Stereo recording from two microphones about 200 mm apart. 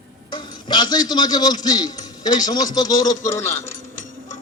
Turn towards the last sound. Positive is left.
turn(degrees=15)  # may be behind; listen again after turning